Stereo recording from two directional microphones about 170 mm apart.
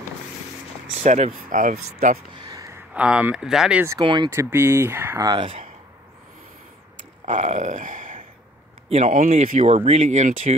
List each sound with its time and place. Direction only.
1.0 s speech: 45° right (ahead or behind)
2.4 s a sound: 20° right (ahead or behind)
2.9 s speech: 5° right (ahead or behind)
4.0 s speech: 25° right (ahead or behind)
4.3 s speech: 15° right (ahead or behind)
7.2 s speech: 45° right (ahead or behind)